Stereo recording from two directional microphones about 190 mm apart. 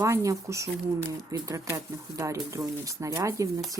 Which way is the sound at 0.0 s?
15° right (ahead or behind).